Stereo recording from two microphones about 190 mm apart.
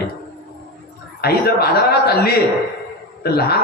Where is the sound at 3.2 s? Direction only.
55° left (ahead or behind).